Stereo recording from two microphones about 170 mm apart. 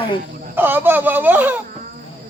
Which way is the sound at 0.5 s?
10° right (ahead or behind).